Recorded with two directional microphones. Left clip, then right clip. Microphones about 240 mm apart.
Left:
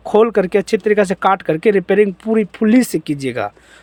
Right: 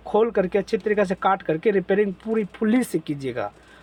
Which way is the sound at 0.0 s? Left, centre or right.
Left.